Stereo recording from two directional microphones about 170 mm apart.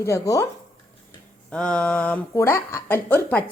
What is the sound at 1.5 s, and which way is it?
Speech, 5° left (ahead or behind).